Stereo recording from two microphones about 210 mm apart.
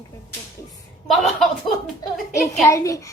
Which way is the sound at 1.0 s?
Centre (ahead or behind).